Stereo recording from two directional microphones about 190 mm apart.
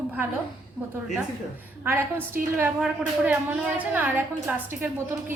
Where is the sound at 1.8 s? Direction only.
10° right (ahead or behind).